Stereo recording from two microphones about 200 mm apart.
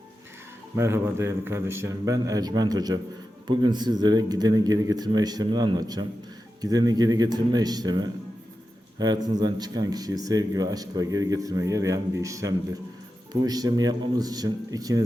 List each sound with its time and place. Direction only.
0.8 s speech: 15° right (ahead or behind)